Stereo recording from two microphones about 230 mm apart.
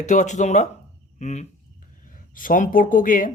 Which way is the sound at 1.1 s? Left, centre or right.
Left.